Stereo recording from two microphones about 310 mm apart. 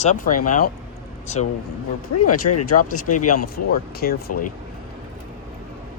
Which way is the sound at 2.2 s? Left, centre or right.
Left.